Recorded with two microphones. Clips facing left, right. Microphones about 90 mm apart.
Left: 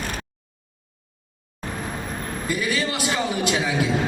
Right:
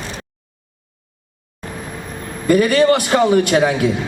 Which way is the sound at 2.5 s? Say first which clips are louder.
Right 14 dB; 55° right (ahead or behind).